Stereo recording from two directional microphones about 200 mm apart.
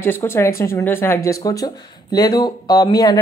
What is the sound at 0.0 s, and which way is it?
Speech, 10° left (ahead or behind).